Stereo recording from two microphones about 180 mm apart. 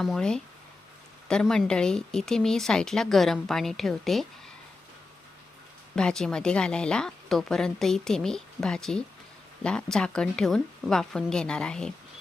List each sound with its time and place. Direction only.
0.0 s speech: 5° left (ahead or behind)
6.0 s speech: 5° left (ahead or behind)